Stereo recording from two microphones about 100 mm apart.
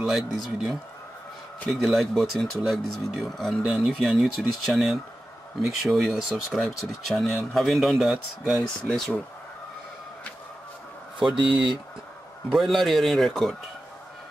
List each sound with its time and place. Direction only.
0.0 s speech: 5° right (ahead or behind)
11.1 s speech: 50° right (ahead or behind)
12.5 s speech: centre (ahead or behind)